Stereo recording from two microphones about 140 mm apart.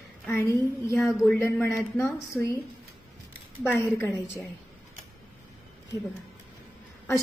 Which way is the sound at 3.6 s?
15° left (ahead or behind).